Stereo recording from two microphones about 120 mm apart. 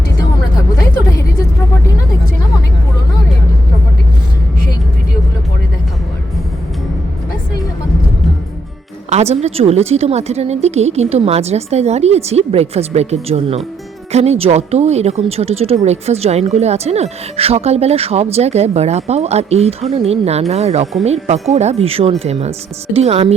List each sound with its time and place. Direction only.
9.0 s speech: 65° right (ahead or behind)